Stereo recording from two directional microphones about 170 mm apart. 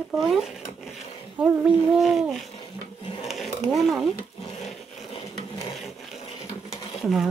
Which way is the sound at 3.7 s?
Centre (ahead or behind).